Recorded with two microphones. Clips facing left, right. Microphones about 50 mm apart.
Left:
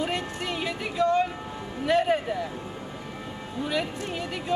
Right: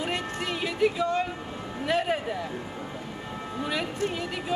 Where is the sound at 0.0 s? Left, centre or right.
Centre.